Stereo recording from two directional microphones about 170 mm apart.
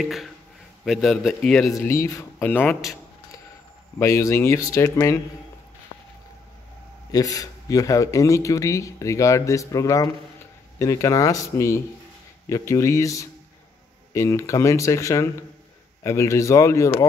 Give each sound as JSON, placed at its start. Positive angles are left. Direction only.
{"t": 0.0, "sound": "a man's voice", "side_deg": 0}
{"t": 1.8, "sound": "speech", "side_deg": 15}
{"t": 4.0, "sound": "speech", "side_deg": 15}
{"t": 7.1, "sound": "a man's voice", "side_deg": 20}